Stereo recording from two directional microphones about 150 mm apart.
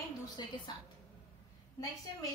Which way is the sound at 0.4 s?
30° left (ahead or behind).